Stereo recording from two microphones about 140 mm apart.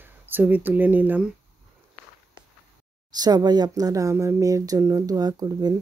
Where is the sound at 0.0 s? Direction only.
15° right (ahead or behind).